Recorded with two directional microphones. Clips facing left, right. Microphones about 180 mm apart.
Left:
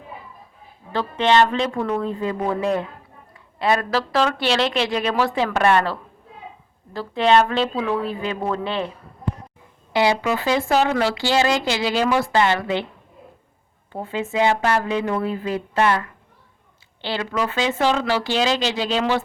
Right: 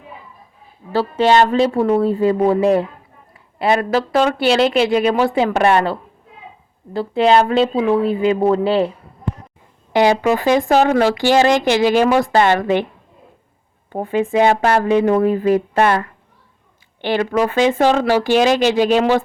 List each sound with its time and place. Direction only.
0.9 s speech: 40° right (ahead or behind)
10.1 s speech: 45° right (ahead or behind)
13.9 s speech: 50° right (ahead or behind)
14.3 s speech: 35° right (ahead or behind)
17.2 s speech: 45° right (ahead or behind)